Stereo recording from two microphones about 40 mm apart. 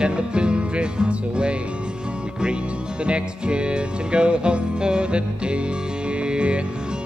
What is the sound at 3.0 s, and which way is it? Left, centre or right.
Music, right.